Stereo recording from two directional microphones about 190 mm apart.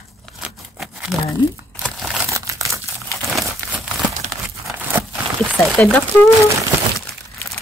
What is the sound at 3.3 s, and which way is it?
Crumpling, centre (ahead or behind).